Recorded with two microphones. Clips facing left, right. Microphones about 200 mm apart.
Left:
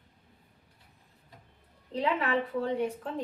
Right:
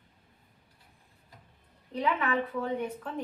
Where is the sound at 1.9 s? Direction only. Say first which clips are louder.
Left 1 dB; 30° left (ahead or behind).